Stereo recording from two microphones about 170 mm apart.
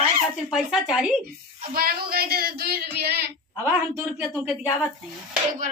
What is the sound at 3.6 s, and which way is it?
Speech, 10° right (ahead or behind).